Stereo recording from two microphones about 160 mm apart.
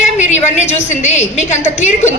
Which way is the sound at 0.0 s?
45° left (ahead or behind).